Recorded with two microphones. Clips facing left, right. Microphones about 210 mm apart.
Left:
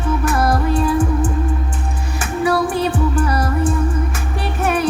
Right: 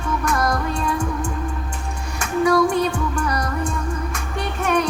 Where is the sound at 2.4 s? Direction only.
30° left (ahead or behind).